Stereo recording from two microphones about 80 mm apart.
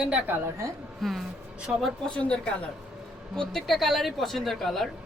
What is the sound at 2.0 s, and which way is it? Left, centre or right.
A woman's voice, centre.